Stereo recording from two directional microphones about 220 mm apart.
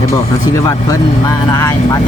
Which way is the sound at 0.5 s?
15° left (ahead or behind).